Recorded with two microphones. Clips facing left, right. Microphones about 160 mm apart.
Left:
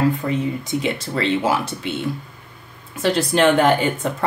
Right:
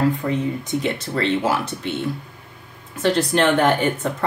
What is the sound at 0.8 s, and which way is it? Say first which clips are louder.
Speech: even; 10° left (ahead or behind).